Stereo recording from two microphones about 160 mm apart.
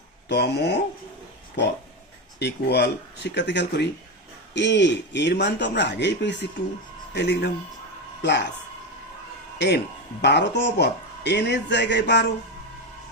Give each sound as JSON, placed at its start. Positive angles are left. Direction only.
{"t": 0.3, "sound": "speech", "side_deg": 90}
{"t": 2.4, "sound": "speech", "side_deg": 90}
{"t": 9.6, "sound": "speech", "side_deg": 90}